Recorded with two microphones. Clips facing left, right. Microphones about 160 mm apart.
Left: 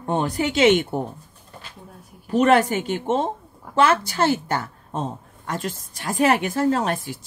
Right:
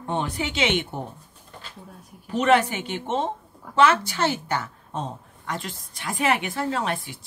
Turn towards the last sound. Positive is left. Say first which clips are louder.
# left 5 dB
turn(degrees=40)  # may be behind; listen again after turning